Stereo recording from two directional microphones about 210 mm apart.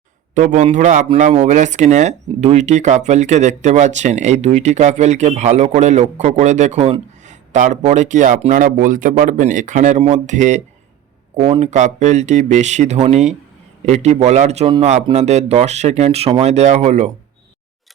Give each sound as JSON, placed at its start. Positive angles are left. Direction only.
{"t": 0.3, "sound": "speech", "side_deg": -35}